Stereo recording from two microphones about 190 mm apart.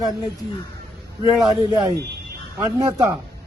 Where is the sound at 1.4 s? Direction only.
20° right (ahead or behind).